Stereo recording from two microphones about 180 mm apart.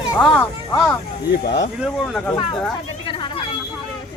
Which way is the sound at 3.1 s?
25° left (ahead or behind).